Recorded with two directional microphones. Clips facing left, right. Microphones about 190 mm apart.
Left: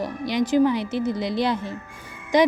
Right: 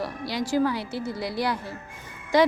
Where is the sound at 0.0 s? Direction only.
20° left (ahead or behind).